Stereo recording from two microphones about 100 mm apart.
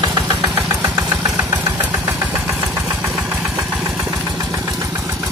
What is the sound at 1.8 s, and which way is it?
Engine, 15° right (ahead or behind).